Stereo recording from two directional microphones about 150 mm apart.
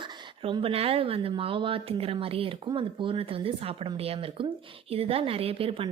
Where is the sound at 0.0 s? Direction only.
30° right (ahead or behind).